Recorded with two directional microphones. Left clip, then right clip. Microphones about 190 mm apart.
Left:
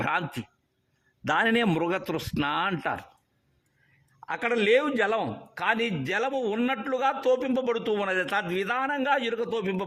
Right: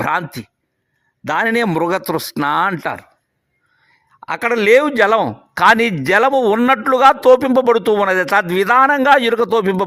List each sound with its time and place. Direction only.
0.0 s a man's voice: 20° right (ahead or behind)
1.7 s speech: 30° right (ahead or behind)
4.2 s speech: 25° right (ahead or behind); by 9.8 s 45° right (ahead or behind)